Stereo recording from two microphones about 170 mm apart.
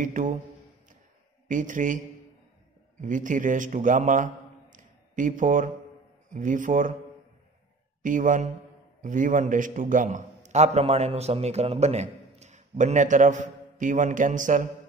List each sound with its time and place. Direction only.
0.0 s speech: 50° right (ahead or behind)
1.5 s speech: 50° right (ahead or behind)
3.0 s a man's voice: 50° right (ahead or behind)
8.0 s a man's voice: 50° right (ahead or behind)